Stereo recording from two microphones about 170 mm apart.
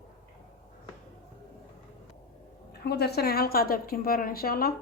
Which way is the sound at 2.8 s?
70° left (ahead or behind).